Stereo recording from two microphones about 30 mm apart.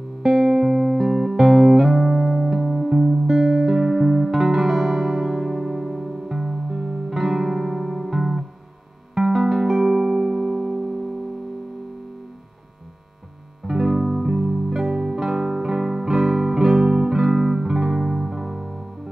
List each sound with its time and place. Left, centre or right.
0.2 s music: centre
2.0 s music: centre
6.7 s music: centre
7.0 s music: centre
13.7 s music: centre